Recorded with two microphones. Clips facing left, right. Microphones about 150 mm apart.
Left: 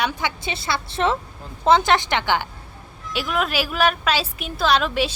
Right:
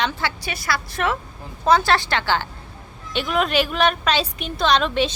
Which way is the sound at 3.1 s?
Centre (ahead or behind).